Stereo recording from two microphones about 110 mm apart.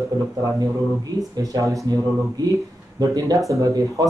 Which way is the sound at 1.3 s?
30° right (ahead or behind).